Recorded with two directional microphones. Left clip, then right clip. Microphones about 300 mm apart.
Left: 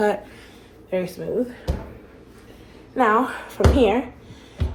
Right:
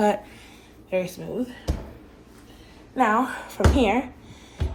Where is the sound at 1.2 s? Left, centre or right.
Right.